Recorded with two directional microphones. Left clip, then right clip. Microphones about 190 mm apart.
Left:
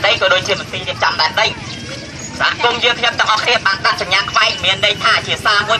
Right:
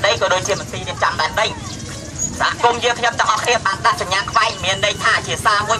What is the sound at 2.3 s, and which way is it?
Speech, 15° right (ahead or behind).